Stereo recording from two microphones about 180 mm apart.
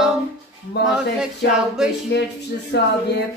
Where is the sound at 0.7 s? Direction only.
65° left (ahead or behind).